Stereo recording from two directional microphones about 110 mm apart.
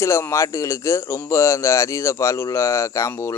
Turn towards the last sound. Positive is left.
turn(degrees=30)  # may be behind; listen again after turning